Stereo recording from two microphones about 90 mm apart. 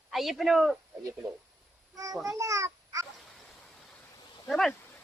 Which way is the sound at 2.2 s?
35° right (ahead or behind).